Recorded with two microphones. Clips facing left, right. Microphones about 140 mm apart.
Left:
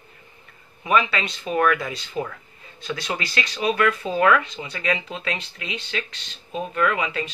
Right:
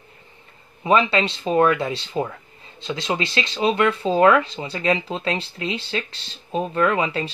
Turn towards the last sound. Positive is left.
turn(degrees=-30)  # may be behind; listen again after turning